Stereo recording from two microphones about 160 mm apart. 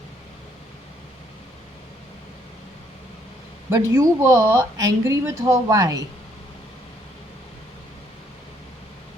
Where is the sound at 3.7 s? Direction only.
20° right (ahead or behind).